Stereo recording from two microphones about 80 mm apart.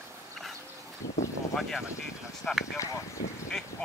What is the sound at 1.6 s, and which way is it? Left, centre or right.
Speech, centre.